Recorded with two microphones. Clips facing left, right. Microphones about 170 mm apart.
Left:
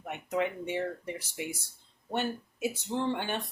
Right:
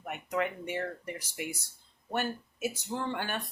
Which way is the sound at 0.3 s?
20° left (ahead or behind).